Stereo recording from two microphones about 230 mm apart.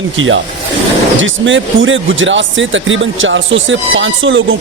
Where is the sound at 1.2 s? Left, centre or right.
Right.